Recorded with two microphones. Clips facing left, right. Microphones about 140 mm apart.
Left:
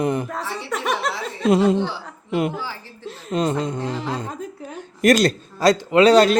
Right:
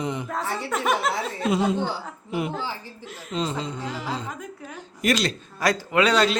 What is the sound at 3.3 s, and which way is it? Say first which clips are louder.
A woman's voice: left 6 dB; 55° left (ahead or behind).